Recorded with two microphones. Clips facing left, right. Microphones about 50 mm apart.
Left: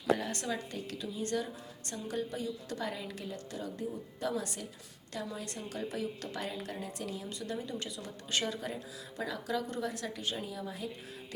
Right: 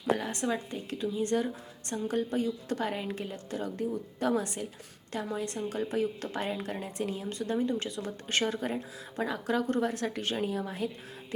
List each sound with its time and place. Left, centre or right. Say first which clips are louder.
0.2 s a woman's voice: right 4 dB; right
5.4 s a woman's voice: right 7 dB; right